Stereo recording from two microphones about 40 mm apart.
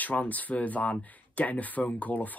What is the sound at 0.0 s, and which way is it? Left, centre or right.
Speech, left.